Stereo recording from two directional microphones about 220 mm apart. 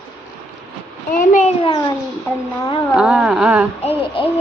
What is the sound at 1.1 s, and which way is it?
Speech, 35° left (ahead or behind).